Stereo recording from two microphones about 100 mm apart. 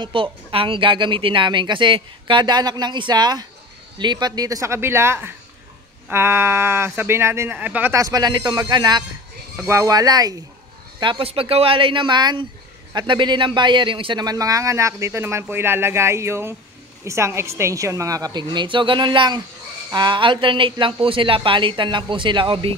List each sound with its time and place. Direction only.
0.0 s a woman's voice: 60° right (ahead or behind); by 7.5 s 25° right (ahead or behind)
7.5 s speech: 15° right (ahead or behind)
7.9 s a woman's voice: 35° right (ahead or behind)
9.6 s a woman's voice: 30° right (ahead or behind)
11.0 s speech: 55° right (ahead or behind)
11.2 s a woman's voice: 75° right (ahead or behind); by 14.2 s 55° right (ahead or behind)
14.2 s a woman's voice: 35° right (ahead or behind); by 22.8 s 60° right (ahead or behind)